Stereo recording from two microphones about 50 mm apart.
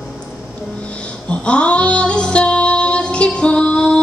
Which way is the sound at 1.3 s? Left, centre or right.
Left.